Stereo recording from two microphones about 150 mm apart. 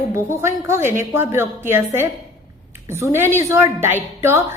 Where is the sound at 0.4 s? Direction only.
15° right (ahead or behind).